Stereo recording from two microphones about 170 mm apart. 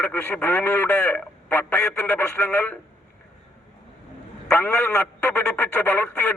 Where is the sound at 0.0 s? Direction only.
10° left (ahead or behind).